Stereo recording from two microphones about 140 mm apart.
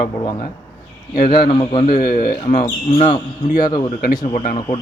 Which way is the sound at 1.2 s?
90° left.